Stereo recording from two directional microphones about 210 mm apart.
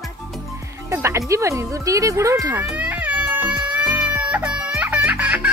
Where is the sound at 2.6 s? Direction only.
5° right (ahead or behind).